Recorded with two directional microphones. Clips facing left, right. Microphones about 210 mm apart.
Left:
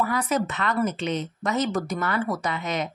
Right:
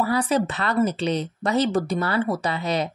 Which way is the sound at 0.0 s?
30° right (ahead or behind).